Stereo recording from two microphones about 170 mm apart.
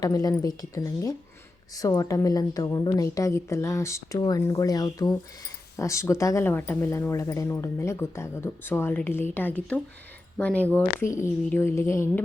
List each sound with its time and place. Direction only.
0.0 s a woman's voice: 20° left (ahead or behind)